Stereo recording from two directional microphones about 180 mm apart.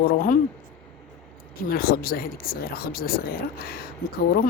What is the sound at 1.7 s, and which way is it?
Speech, 55° left (ahead or behind).